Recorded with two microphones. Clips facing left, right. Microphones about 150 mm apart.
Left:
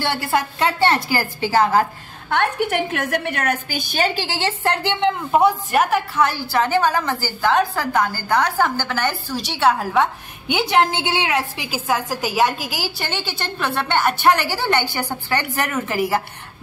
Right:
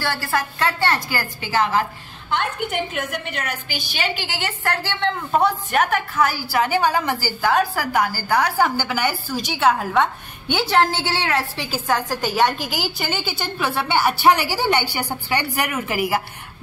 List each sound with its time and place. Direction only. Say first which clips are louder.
0.0 s a woman's voice: left 3 dB; 20° left (ahead or behind); by 1.9 s 40° left (ahead or behind)
2.2 s a woman's voice: left 4 dB; 60° left (ahead or behind); by 10.0 s centre (ahead or behind)
10.5 s a woman's voice: left 1 dB; 15° left (ahead or behind); by 16.2 s 5° right (ahead or behind)